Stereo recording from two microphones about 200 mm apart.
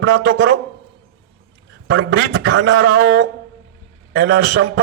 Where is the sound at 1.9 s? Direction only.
65° right (ahead or behind).